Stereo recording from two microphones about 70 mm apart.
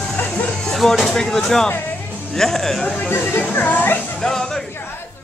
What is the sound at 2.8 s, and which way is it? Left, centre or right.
Speech, centre.